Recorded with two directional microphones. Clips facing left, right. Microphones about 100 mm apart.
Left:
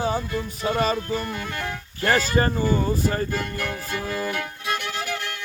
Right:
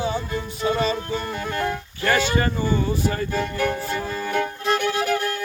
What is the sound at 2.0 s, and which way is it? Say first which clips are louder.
Music: even; 40° left (ahead or behind).